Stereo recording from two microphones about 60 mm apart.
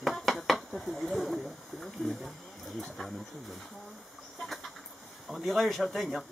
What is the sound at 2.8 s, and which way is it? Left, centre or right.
Speech, centre.